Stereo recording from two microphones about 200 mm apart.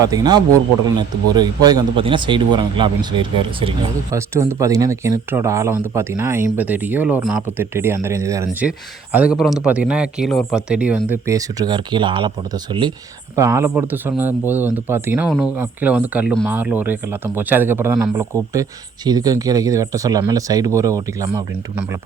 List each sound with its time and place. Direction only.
0.0 s speech: 20° right (ahead or behind)
4.1 s speech: 15° right (ahead or behind)
13.3 s speech: 15° right (ahead or behind)